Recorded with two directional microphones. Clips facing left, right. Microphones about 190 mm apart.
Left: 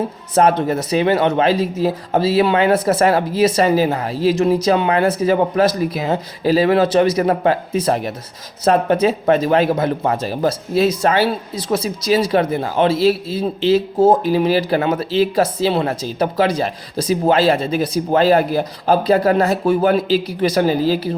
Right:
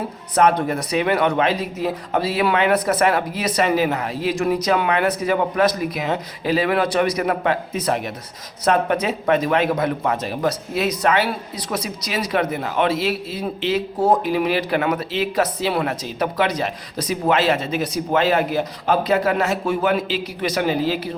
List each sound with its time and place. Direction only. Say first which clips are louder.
0.3 s speech: left 3 dB; 30° left (ahead or behind)